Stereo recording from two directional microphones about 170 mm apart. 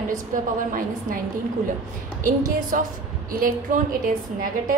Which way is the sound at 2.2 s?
50° right (ahead or behind).